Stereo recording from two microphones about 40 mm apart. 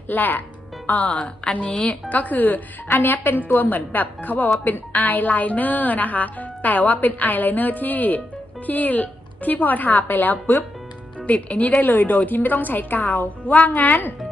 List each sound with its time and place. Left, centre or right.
0.1 s a woman's voice: left
1.5 s a woman's voice: left
2.0 s a woman's voice: left
2.9 s a woman's voice: left
11.3 s a woman's voice: left